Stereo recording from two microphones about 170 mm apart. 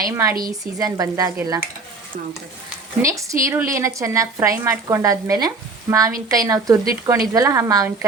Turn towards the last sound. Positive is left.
turn(degrees=-20)  # may be behind; listen again after turning